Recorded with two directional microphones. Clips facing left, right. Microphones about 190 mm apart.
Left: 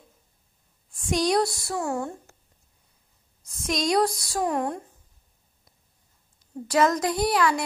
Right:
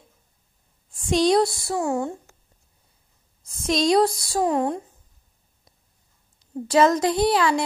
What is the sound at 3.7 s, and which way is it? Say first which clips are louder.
A woman's voice: right 4 dB; 30° right (ahead or behind).